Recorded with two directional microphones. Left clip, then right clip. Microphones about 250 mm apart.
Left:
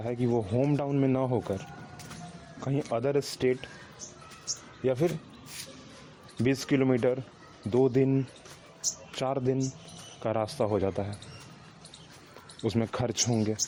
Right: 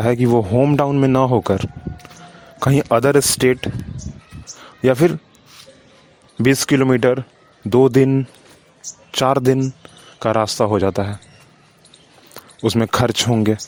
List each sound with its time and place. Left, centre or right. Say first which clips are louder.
0.0 s speech: right 14 dB; right
4.8 s speech: right 13 dB; right
6.4 s speech: right 12 dB; right
12.6 s speech: right 13 dB; right